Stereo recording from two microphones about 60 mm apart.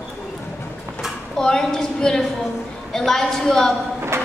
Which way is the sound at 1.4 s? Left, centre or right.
Centre.